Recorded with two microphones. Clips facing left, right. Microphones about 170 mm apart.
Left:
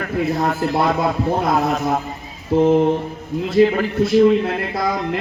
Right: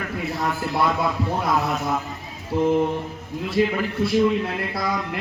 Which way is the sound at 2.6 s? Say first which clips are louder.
Left 5 dB; 60° left (ahead or behind).